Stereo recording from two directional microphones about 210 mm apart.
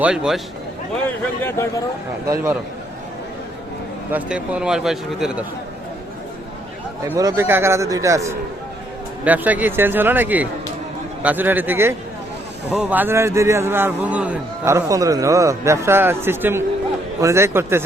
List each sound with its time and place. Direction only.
0.0 s speech: 5° right (ahead or behind)
1.4 s a man's voice: 10° left (ahead or behind)
2.2 s a man's voice: 15° right (ahead or behind)
4.1 s speech: 5° right (ahead or behind)
7.0 s a man's voice: 15° right (ahead or behind)